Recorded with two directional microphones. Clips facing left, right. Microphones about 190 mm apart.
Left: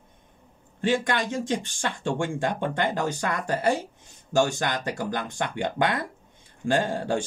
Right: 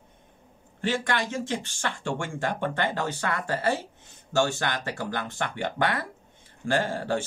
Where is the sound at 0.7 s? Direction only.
15° left (ahead or behind).